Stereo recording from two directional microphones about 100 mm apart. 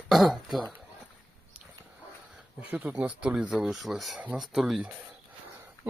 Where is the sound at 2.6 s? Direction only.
15° right (ahead or behind).